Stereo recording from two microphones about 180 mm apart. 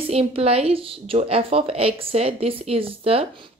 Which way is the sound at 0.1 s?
35° right (ahead or behind).